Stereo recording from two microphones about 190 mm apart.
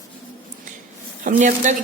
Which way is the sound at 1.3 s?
40° right (ahead or behind).